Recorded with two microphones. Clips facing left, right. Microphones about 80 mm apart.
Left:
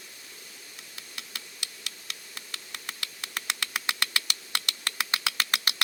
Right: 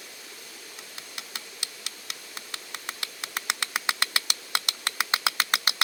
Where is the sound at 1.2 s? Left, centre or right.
Right.